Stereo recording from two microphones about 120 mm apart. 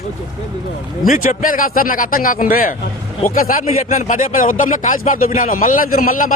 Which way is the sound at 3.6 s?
90° left.